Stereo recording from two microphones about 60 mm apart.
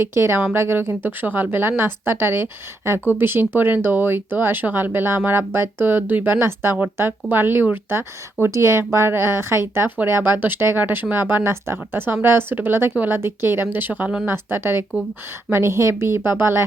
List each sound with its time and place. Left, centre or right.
0.0 s a woman's voice: right
6.4 s a woman's voice: right